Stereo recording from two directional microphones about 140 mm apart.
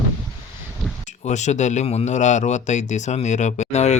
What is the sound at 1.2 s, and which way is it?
Speech, 55° left (ahead or behind).